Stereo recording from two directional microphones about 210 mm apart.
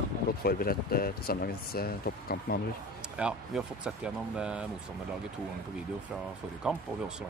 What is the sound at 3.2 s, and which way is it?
Speech, 5° right (ahead or behind).